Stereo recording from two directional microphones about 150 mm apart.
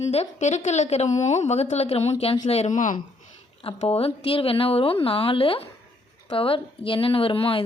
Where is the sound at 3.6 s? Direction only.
40° left (ahead or behind).